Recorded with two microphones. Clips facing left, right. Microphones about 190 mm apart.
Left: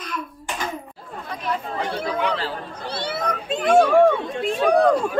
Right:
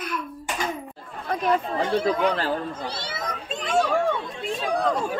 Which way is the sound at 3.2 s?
60° left (ahead or behind).